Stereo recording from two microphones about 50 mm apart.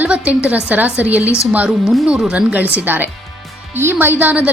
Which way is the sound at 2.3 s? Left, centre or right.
Right.